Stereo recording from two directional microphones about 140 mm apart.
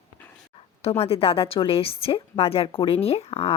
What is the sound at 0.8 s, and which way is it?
Speech, 45° left (ahead or behind).